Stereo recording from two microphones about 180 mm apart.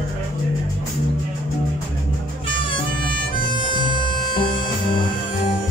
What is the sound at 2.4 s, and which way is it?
Music, 25° left (ahead or behind).